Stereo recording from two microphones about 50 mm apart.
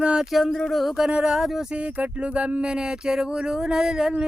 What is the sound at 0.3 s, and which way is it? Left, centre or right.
Speech, centre.